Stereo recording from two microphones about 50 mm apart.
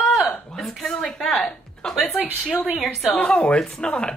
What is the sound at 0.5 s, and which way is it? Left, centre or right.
Speech, centre.